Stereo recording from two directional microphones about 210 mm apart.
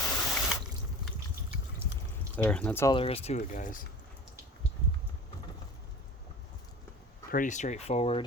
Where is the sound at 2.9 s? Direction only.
25° left (ahead or behind).